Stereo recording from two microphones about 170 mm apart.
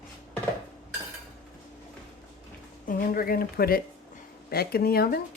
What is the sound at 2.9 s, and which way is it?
Speech, 55° left (ahead or behind).